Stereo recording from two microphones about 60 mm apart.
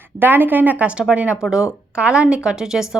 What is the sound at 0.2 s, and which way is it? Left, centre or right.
A woman's voice, right.